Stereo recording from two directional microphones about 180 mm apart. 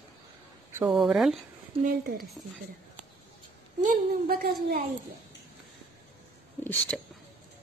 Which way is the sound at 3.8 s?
50° right (ahead or behind).